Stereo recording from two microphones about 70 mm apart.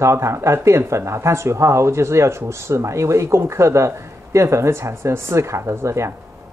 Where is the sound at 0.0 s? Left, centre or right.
Right.